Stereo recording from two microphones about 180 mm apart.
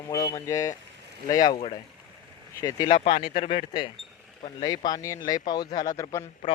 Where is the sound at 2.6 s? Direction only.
25° left (ahead or behind).